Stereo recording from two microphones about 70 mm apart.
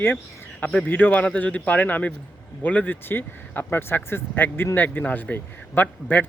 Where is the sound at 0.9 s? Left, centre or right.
Left.